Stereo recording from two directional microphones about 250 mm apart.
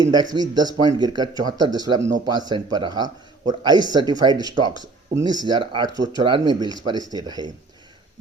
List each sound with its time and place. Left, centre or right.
0.0 s speech: centre